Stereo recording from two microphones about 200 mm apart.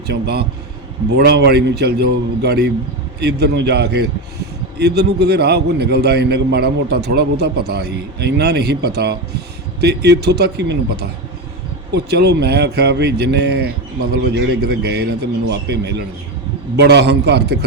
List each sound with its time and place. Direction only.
0.1 s a man's voice: 55° right (ahead or behind)